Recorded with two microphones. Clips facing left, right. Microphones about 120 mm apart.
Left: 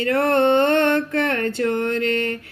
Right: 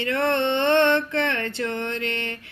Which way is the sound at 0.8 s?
45° left (ahead or behind).